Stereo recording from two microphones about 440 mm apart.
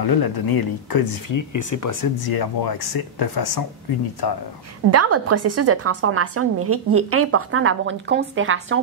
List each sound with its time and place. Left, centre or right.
0.0 s speech: left
4.9 s a woman's voice: right